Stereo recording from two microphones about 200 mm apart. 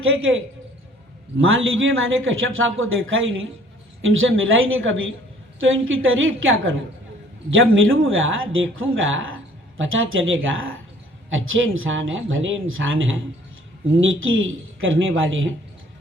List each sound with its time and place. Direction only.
0.0 s speech: 80° right